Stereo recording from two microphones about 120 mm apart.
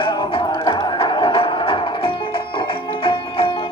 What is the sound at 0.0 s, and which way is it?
Music, 45° left (ahead or behind).